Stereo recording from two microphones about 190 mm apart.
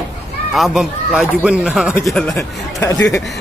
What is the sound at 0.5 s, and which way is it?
Speech, centre (ahead or behind).